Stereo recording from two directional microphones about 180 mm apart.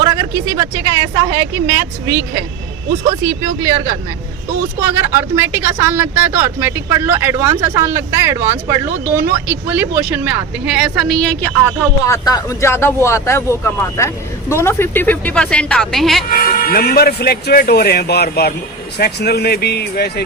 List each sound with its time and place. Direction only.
0.0 s a woman's voice: 20° right (ahead or behind); by 11.2 s 5° right (ahead or behind)
12.0 s speech: 20° left (ahead or behind); by 16.2 s centre (ahead or behind)
16.3 s speech: 55° left (ahead or behind)